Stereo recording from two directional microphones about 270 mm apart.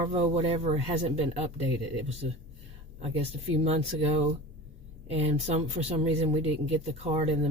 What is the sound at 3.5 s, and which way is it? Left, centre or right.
Speech, right.